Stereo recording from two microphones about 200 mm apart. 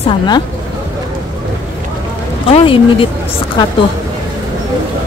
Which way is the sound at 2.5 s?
25° left (ahead or behind).